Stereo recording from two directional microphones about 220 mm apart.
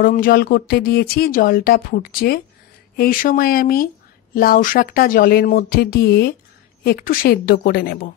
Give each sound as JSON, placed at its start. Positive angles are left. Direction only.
{"t": 0.0, "sound": "speech", "side_deg": 40}